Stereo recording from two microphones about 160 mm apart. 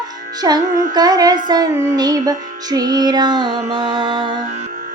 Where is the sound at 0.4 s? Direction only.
25° right (ahead or behind).